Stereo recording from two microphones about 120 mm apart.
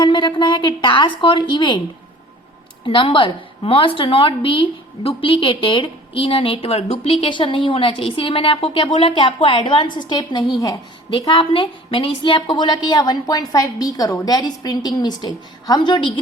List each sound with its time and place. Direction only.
0.0 s a woman's voice: 40° left (ahead or behind)
2.8 s a woman's voice: 45° left (ahead or behind)